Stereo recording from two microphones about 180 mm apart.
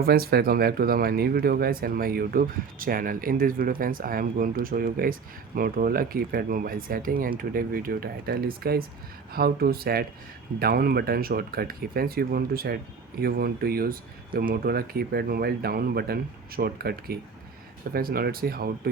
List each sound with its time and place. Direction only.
0.0 s speech: 55° right (ahead or behind)